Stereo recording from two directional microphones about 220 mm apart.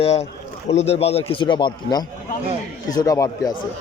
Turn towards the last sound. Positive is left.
turn(degrees=15)  # may be behind; listen again after turning